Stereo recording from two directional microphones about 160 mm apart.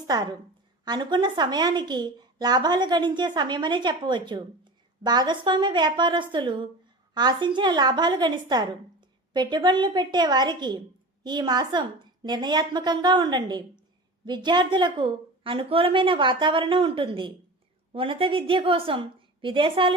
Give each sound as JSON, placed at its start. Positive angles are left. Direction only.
{"t": 0.9, "sound": "a woman's voice", "side_deg": -25}